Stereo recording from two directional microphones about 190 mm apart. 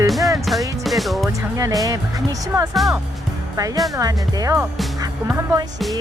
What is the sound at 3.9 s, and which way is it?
Speech, 20° right (ahead or behind).